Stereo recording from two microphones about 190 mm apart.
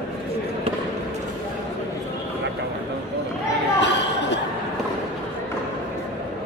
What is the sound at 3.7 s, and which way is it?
Chatter, 70° left (ahead or behind).